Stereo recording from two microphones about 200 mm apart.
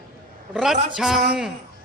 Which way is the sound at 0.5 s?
Centre (ahead or behind).